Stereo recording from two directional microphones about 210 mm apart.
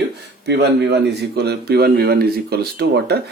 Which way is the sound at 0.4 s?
55° right (ahead or behind).